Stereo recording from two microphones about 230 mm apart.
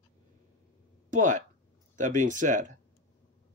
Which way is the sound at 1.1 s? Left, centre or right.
Right.